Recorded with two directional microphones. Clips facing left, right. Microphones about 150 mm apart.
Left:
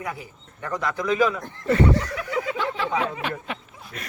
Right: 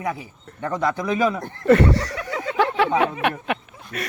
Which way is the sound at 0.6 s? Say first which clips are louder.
Right 4 dB; 25° right (ahead or behind).